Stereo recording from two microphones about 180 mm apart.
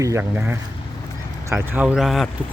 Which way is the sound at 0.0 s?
15° right (ahead or behind).